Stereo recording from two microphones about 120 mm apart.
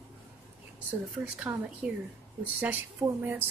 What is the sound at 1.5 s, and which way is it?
Speech, 20° right (ahead or behind).